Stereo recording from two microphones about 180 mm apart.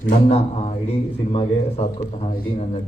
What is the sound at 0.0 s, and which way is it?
Speech, 40° left (ahead or behind).